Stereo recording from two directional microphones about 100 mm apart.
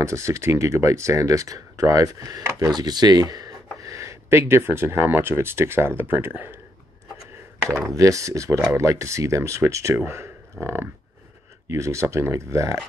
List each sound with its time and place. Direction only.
0.0 s speech: 30° right (ahead or behind)
7.9 s speech: 35° right (ahead or behind)